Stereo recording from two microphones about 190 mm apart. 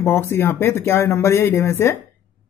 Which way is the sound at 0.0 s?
10° left (ahead or behind).